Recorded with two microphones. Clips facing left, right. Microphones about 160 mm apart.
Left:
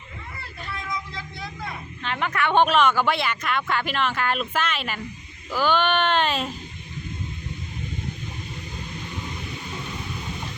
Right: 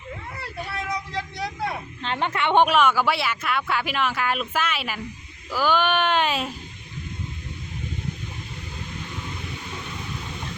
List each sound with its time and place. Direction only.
0.7 s vehicle: 70° right (ahead or behind)
2.0 s speech: 30° right (ahead or behind)
2.6 s speech: 10° right (ahead or behind)